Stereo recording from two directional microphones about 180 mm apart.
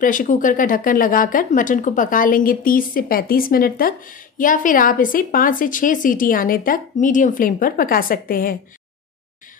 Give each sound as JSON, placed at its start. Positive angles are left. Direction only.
{"t": 0.0, "sound": "speech", "side_deg": 50}